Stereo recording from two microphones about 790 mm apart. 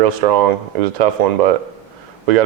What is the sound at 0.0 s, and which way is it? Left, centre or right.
Speech, right.